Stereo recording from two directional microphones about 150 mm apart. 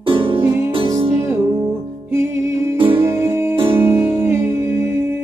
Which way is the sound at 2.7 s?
35° right (ahead or behind).